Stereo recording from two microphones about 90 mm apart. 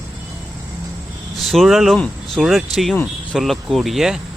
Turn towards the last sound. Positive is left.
turn(degrees=-5)  # may be behind; listen again after turning